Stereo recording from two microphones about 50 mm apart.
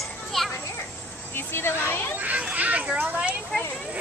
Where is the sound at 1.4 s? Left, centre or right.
Left.